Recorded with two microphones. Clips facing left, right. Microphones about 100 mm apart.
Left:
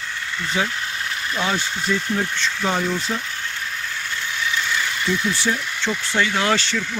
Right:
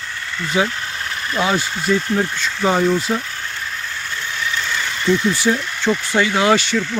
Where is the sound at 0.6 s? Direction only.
15° right (ahead or behind).